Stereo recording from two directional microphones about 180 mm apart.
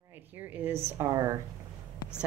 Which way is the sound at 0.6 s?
15° right (ahead or behind).